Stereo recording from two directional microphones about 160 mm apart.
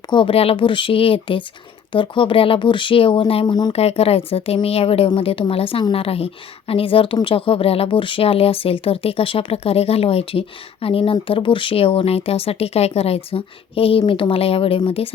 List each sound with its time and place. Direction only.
0.1 s a woman's voice: 35° left (ahead or behind)
3.7 s a woman's voice: 40° left (ahead or behind)